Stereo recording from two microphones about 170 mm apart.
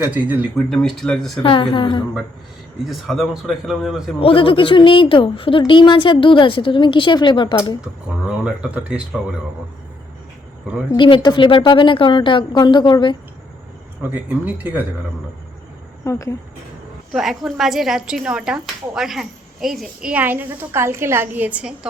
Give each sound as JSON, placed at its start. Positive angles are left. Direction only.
{"t": 0.0, "sound": "speech", "side_deg": -10}
{"t": 0.5, "sound": "speech", "side_deg": 0}
{"t": 1.4, "sound": "a woman's voice", "side_deg": 30}
{"t": 2.9, "sound": "speech", "side_deg": 0}
{"t": 4.2, "sound": "a woman's voice", "side_deg": 35}
{"t": 7.8, "sound": "speech", "side_deg": -5}
{"t": 10.9, "sound": "a woman's voice", "side_deg": 30}
{"t": 14.1, "sound": "speech", "side_deg": -10}
{"t": 16.0, "sound": "speech", "side_deg": 15}
{"t": 17.1, "sound": "speech", "side_deg": 0}